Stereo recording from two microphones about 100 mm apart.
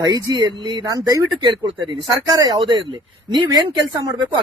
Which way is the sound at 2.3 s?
50° right (ahead or behind).